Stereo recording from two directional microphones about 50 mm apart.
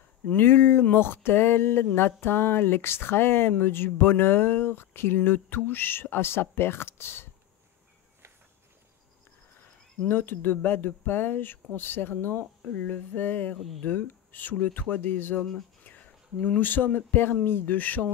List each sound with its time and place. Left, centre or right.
0.3 s speech: left
10.0 s speech: left
12.7 s speech: left
15.8 s a sound: left
16.4 s speech: left